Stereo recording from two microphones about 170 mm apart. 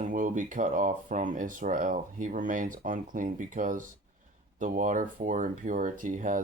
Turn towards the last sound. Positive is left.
turn(degrees=-50)  # may be behind; listen again after turning